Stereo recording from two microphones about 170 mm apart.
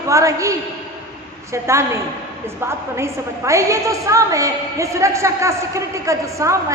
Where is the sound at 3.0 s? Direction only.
15° right (ahead or behind).